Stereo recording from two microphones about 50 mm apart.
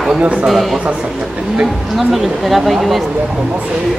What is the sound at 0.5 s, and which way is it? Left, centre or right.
Speech, centre.